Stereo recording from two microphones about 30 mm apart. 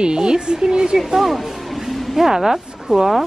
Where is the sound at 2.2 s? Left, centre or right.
Centre.